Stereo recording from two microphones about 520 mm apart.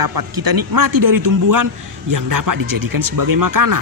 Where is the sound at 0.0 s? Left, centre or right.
Right.